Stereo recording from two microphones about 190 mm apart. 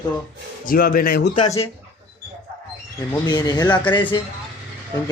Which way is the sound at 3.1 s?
20° left (ahead or behind).